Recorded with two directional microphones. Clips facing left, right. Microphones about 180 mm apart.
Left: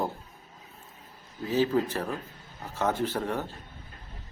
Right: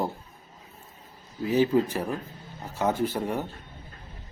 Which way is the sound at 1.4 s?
15° right (ahead or behind).